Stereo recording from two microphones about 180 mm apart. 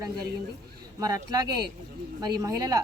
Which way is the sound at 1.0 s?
20° right (ahead or behind).